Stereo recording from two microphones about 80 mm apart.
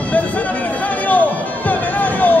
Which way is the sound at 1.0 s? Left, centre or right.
Centre.